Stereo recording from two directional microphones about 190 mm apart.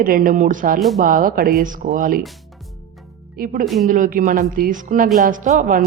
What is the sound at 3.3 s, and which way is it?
Speech, 50° right (ahead or behind).